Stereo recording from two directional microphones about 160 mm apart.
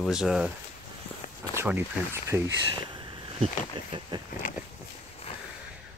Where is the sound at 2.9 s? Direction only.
30° right (ahead or behind).